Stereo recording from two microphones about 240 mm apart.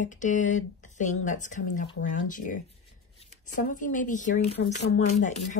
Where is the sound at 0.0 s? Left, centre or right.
Left.